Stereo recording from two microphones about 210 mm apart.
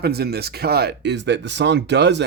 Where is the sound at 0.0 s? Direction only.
50° right (ahead or behind).